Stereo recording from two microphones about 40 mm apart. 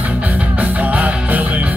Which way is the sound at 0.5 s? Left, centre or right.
Right.